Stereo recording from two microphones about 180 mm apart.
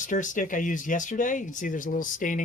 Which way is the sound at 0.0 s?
45° left (ahead or behind).